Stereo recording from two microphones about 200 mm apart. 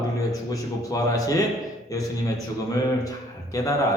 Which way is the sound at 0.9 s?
15° left (ahead or behind).